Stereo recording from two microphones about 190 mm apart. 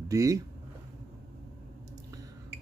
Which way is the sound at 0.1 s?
15° right (ahead or behind).